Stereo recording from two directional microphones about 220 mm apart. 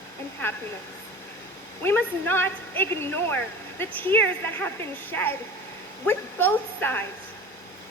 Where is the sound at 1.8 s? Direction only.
10° left (ahead or behind).